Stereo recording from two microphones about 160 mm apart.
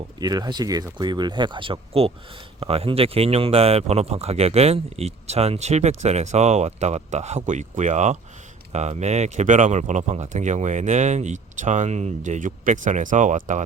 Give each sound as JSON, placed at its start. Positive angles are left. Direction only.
{"t": 0.2, "sound": "speech", "side_deg": -25}